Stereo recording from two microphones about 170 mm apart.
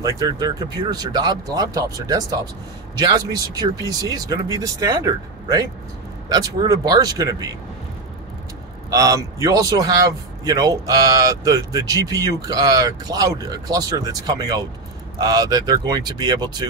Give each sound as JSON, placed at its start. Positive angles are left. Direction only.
{"t": 0.0, "sound": "a man's voice", "side_deg": -20}
{"t": 8.9, "sound": "a man's voice", "side_deg": -20}